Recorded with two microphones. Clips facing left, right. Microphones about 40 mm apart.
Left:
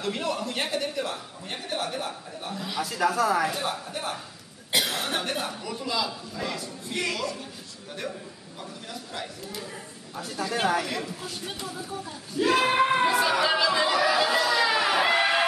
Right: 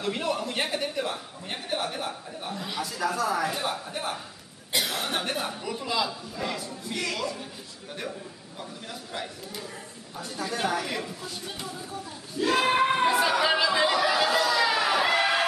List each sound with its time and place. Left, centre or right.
0.0 s a man's voice: centre
3.2 s speech: centre
3.4 s speech: centre
6.9 s speech: centre
9.1 s speech: centre
10.5 s speech: centre
10.9 s speech: centre
12.4 s speech: centre
14.0 s a sound: centre